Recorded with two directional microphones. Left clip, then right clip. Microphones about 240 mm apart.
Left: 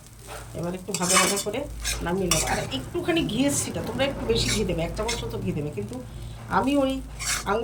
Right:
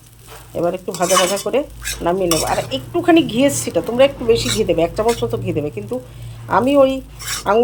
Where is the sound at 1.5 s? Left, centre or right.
Right.